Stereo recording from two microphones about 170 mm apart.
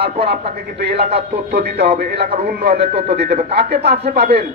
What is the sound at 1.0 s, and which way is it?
Speech, 40° right (ahead or behind).